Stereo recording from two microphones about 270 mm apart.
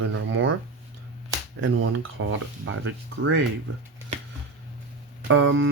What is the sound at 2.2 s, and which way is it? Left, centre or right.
Speech, right.